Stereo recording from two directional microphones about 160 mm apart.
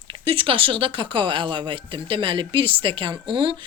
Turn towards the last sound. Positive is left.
turn(degrees=-30)  # may be behind; listen again after turning